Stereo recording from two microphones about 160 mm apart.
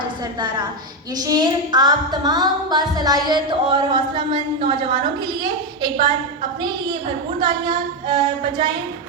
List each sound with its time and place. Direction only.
1.2 s music: 25° right (ahead or behind)